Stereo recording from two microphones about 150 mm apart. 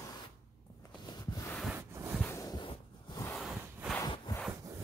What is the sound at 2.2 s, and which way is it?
Heart sounds, 20° left (ahead or behind).